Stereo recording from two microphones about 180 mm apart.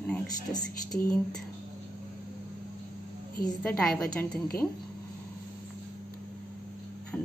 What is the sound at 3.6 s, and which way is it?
Speech, 5° left (ahead or behind).